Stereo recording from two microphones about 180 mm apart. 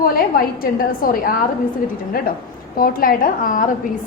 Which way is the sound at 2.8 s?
55° left (ahead or behind).